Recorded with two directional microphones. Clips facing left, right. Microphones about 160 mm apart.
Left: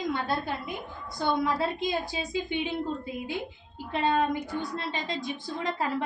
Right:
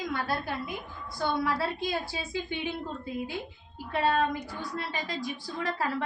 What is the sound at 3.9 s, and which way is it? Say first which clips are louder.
A woman's voice: left 1 dB; 20° left (ahead or behind).